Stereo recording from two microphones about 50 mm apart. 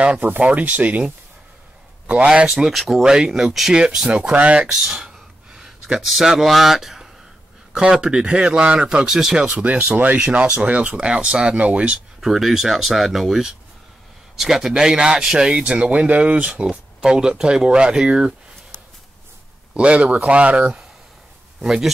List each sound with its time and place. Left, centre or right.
0.4 s speech: right
2.4 s speech: centre
3.0 s speech: centre
4.0 s speech: right
4.6 s a sound: centre
5.9 s speech: centre
9.6 s speech: right
12.2 s speech: centre
15.6 s speech: right
16.6 s speech: centre
19.7 s speech: right
21.6 s speech: centre